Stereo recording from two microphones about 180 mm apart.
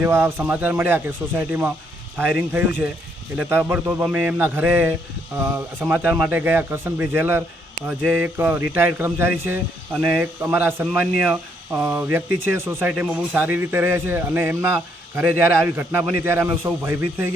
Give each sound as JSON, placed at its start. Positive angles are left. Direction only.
{"t": 0.0, "sound": "speech", "side_deg": -10}